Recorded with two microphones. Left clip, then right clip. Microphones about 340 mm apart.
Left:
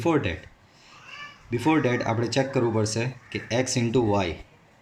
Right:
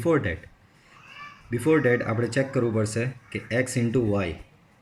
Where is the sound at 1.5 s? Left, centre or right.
Centre.